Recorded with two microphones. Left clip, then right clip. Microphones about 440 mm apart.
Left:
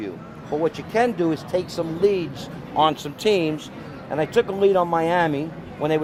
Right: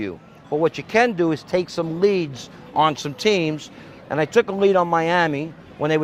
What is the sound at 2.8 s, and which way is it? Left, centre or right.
Speech, right.